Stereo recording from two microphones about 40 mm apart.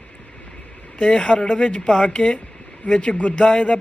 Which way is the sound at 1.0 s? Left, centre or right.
Left.